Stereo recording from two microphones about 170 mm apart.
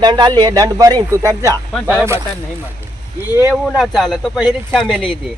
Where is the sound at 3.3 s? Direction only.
10° right (ahead or behind).